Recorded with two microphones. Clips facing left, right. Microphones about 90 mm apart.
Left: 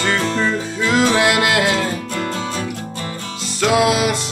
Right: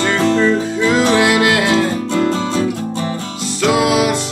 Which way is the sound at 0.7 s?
25° right (ahead or behind).